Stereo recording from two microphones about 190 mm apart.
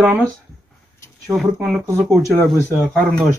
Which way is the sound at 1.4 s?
Centre (ahead or behind).